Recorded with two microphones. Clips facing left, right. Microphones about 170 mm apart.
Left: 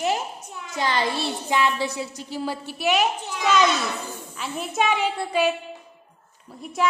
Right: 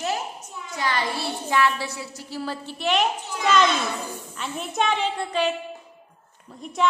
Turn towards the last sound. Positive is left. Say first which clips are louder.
# left 1 dB
turn(degrees=5)  # may be behind; listen again after turning